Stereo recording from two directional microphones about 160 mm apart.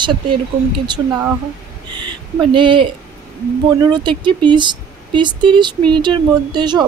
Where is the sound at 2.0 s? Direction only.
30° right (ahead or behind).